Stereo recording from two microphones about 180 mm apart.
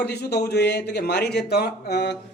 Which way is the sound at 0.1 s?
65° left (ahead or behind).